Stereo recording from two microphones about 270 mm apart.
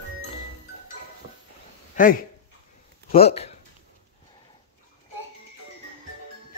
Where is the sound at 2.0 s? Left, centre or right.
Left.